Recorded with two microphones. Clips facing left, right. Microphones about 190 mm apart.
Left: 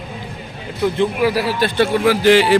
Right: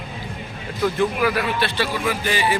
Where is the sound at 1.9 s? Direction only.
75° left (ahead or behind).